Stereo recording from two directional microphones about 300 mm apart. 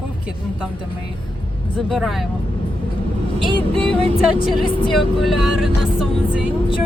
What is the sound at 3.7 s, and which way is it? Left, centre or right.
Music, centre.